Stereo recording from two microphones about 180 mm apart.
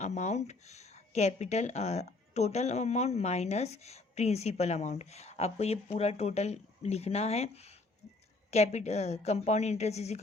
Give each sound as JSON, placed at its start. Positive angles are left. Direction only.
{"t": 0.0, "sound": "speech", "side_deg": 40}